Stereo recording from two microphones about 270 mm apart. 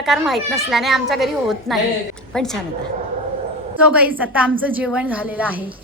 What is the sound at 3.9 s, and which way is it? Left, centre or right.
A woman's voice, centre.